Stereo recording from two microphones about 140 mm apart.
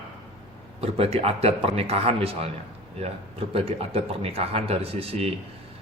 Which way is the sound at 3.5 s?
45° right (ahead or behind).